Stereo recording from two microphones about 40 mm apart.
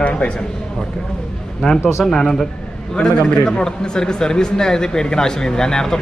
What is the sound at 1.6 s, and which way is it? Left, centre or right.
A man's voice, centre.